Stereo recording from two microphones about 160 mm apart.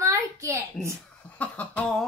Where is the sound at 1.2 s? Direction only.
10° left (ahead or behind).